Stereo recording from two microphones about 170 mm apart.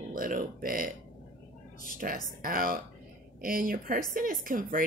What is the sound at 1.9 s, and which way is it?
A woman's voice, 55° right (ahead or behind).